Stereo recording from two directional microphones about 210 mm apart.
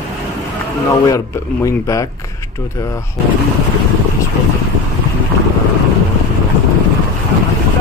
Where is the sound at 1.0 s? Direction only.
15° left (ahead or behind).